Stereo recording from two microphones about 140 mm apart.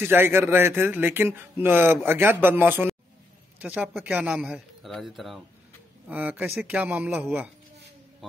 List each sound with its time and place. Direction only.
0.0 s a man's voice: 15° right (ahead or behind)
6.0 s a man's voice: 10° right (ahead or behind)